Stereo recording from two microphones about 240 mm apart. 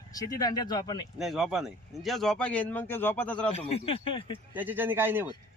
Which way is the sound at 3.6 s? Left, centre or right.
Left.